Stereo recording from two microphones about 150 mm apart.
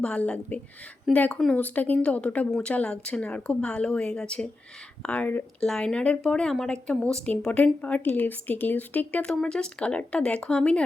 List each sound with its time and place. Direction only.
0.0 s a woman's voice: 10° left (ahead or behind)